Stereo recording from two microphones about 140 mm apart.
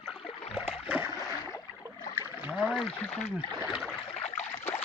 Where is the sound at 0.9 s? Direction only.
15° right (ahead or behind).